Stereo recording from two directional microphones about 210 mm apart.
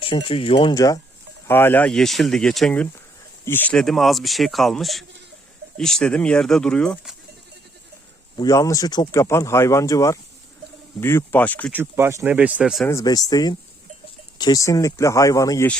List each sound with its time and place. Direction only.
0.0 s speech: 25° left (ahead or behind); by 7.2 s centre (ahead or behind)
8.4 s speech: 15° left (ahead or behind)
11.7 s speech: 10° right (ahead or behind)
12.9 s speech: 15° left (ahead or behind)